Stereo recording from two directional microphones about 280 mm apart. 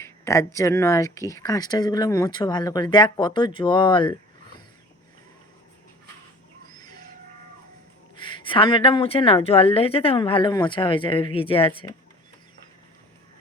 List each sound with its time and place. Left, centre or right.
0.0 s speech: centre
6.7 s a sound: centre
8.2 s speech: centre